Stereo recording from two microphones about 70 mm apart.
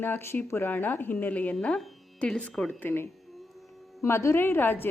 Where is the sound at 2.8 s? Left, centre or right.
Left.